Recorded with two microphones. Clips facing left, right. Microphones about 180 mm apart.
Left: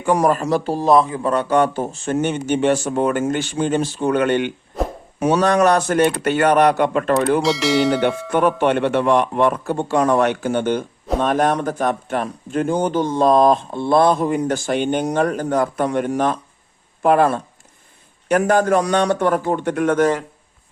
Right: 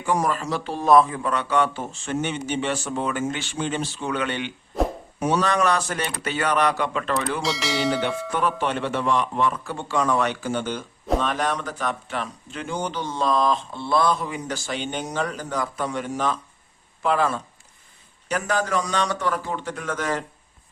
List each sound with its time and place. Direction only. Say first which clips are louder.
0.0 s a man's voice: left 7 dB; 55° left (ahead or behind); by 1.3 s 30° left (ahead or behind)
1.3 s speech: left 6 dB; 45° left (ahead or behind)
4.7 s a sound: even; centre (ahead or behind)
5.2 s speech: left 6 dB; 60° left (ahead or behind)
7.4 s speech: left 7 dB; centre (ahead or behind)
8.3 s a man's voice: left 10 dB; 55° left (ahead or behind)